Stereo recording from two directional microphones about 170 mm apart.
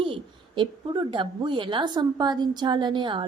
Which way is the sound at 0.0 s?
30° right (ahead or behind).